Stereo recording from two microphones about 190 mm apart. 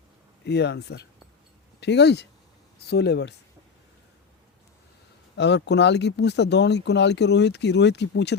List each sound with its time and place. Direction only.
0.4 s speech: 60° left (ahead or behind)
5.4 s speech: 65° left (ahead or behind)